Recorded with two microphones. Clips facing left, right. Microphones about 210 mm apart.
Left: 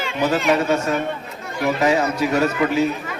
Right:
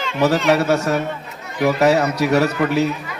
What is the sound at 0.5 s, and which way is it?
A man's voice, 70° right (ahead or behind).